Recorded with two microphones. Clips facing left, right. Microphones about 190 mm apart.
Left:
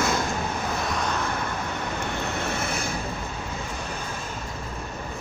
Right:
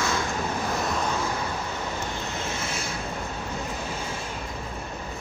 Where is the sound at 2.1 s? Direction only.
60° left (ahead or behind).